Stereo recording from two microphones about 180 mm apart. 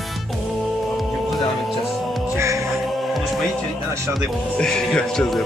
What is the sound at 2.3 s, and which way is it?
Music, 15° right (ahead or behind).